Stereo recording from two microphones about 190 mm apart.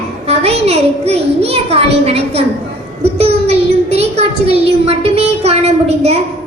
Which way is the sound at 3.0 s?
30° right (ahead or behind).